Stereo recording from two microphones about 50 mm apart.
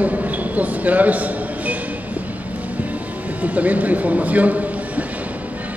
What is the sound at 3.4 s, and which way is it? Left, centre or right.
A man's voice, right.